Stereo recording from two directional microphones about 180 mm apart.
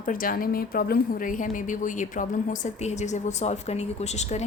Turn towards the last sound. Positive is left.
turn(degrees=40)  # may be behind; listen again after turning